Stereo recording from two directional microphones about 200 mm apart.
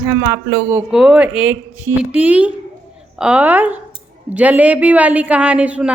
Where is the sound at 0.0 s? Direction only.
10° right (ahead or behind).